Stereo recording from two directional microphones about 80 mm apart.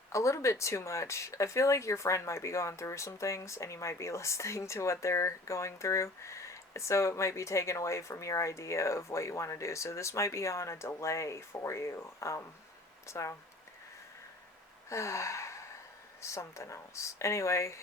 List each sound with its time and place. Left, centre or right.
0.1 s speech: left
14.8 s gasp: left
16.2 s speech: left